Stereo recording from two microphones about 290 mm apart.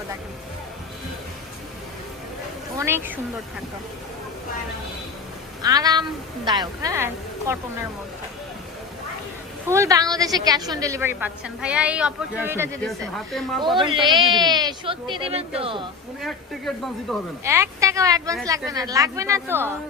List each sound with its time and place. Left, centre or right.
2.7 s speech: centre
5.6 s a woman's voice: centre
9.6 s a woman's voice: centre
13.7 s a woman's voice: centre
16.2 s a woman's voice: centre